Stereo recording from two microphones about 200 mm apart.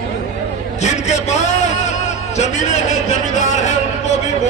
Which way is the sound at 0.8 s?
35° left (ahead or behind).